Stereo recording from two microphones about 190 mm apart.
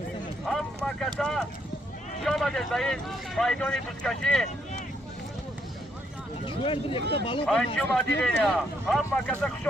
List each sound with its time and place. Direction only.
0.4 s vehicle: centre (ahead or behind)
1.2 s speech: 5° left (ahead or behind)
6.4 s speech: 25° left (ahead or behind)
7.4 s speech: 5° left (ahead or behind)